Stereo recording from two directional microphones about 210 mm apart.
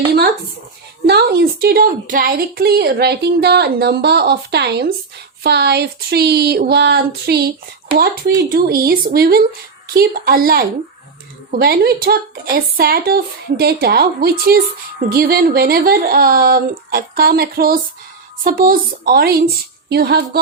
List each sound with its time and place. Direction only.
1.0 s a woman's voice: 50° right (ahead or behind)